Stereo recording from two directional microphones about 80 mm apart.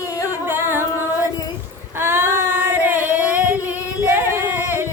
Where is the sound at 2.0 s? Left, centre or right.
Right.